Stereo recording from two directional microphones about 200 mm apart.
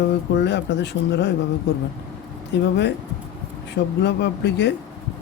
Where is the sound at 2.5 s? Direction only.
60° left (ahead or behind).